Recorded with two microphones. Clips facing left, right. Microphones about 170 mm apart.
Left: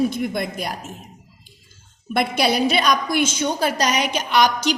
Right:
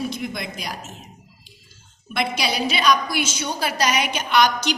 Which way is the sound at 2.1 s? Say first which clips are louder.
Left 5 dB; 50° left (ahead or behind).